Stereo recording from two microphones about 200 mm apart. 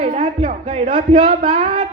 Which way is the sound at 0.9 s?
25° right (ahead or behind).